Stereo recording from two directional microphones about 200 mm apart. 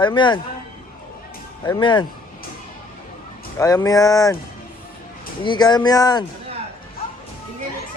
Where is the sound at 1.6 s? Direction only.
20° left (ahead or behind).